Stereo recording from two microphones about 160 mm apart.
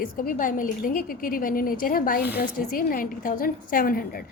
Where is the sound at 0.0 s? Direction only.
60° left (ahead or behind).